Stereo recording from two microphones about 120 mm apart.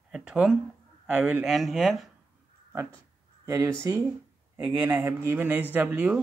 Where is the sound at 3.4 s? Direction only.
25° right (ahead or behind).